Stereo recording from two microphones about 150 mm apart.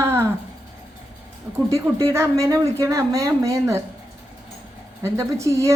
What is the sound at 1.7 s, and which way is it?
Speech, 20° right (ahead or behind).